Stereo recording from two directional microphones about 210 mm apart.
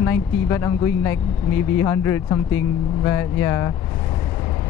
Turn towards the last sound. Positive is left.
turn(degrees=10)  # may be behind; listen again after turning